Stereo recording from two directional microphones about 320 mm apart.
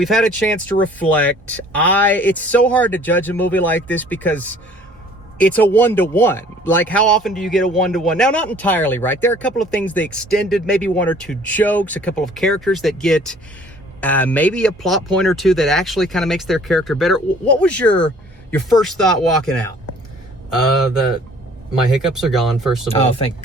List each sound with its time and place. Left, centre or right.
0.0 s speech: centre
22.1 s speech: centre
22.9 s speech: centre